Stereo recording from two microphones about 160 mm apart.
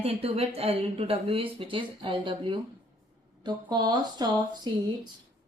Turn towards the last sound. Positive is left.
turn(degrees=-25)  # may be behind; listen again after turning